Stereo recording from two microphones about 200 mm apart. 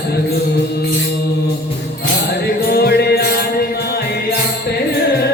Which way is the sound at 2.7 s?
55° left (ahead or behind).